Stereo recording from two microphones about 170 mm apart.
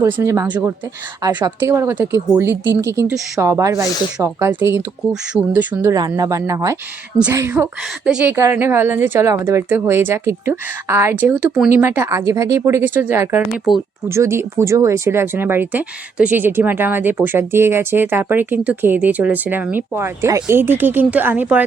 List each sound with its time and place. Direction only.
0.2 s speech: 15° right (ahead or behind)
13.7 s speech: centre (ahead or behind)
14.1 s speech: 15° right (ahead or behind)